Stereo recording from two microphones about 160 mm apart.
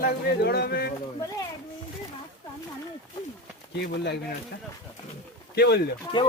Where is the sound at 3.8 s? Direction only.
90° left.